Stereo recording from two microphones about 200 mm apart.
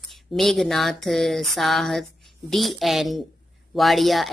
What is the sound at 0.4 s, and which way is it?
A woman's voice, centre (ahead or behind).